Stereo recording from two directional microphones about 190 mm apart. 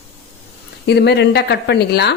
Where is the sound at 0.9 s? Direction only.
60° left (ahead or behind).